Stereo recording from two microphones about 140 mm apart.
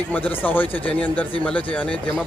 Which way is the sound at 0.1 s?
10° left (ahead or behind).